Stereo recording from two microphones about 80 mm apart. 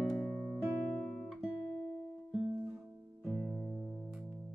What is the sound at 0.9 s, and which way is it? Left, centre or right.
Guitar, centre.